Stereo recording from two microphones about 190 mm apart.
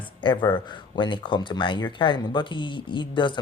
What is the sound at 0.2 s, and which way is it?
Speech, 25° left (ahead or behind).